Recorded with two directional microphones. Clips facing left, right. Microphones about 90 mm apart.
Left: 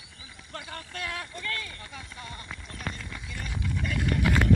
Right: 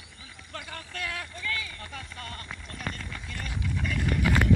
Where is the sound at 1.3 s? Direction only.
45° left (ahead or behind).